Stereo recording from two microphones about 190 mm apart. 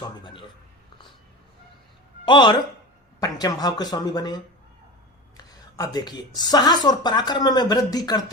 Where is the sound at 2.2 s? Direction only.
25° left (ahead or behind).